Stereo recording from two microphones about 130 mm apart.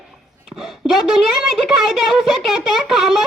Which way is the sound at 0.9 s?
Centre (ahead or behind).